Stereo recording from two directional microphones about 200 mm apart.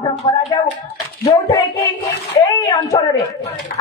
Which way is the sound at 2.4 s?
15° left (ahead or behind).